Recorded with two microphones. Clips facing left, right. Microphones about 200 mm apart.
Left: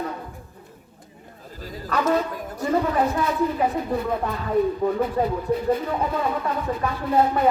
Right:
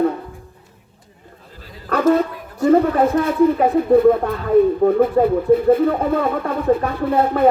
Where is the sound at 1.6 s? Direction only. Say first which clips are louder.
Left 7 dB; 45° left (ahead or behind).